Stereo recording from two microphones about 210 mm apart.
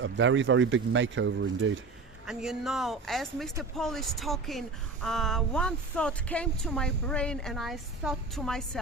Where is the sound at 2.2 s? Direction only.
Centre (ahead or behind).